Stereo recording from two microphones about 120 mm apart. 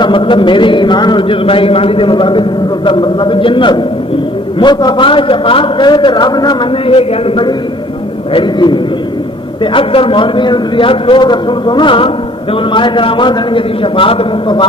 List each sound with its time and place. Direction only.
0.0 s a man's voice: 45° left (ahead or behind)
6.9 s a man's voice: 50° left (ahead or behind)